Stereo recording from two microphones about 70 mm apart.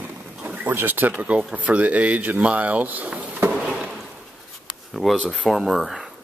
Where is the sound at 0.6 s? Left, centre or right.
Right.